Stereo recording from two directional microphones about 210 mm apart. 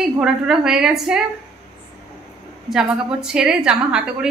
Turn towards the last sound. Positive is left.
turn(degrees=-5)  # may be behind; listen again after turning